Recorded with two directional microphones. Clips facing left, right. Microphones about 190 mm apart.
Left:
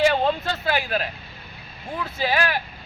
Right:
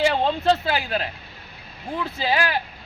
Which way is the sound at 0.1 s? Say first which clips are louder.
Right 2 dB; 30° right (ahead or behind).